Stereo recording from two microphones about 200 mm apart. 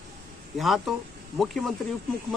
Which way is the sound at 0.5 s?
Centre (ahead or behind).